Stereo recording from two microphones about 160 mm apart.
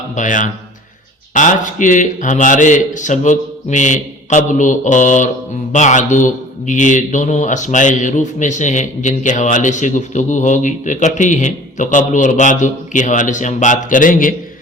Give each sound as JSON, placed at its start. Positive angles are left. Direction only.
{"t": 0.2, "sound": "a man's voice", "side_deg": 55}